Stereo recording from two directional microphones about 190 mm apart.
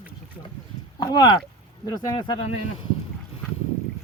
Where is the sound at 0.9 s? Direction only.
20° left (ahead or behind).